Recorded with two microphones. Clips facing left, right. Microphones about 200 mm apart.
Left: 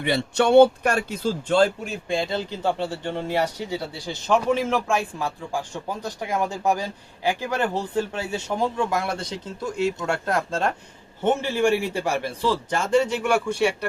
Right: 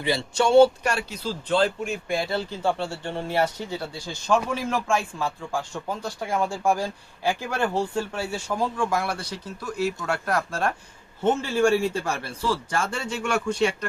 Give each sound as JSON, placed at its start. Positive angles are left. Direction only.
{"t": 0.0, "sound": "speech", "side_deg": 60}
{"t": 2.0, "sound": "speech", "side_deg": 20}